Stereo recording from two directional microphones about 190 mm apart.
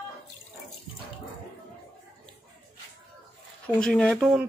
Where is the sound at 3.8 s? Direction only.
5° left (ahead or behind).